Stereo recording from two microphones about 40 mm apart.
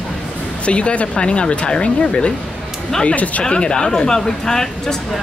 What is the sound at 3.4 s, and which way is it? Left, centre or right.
Speech, left.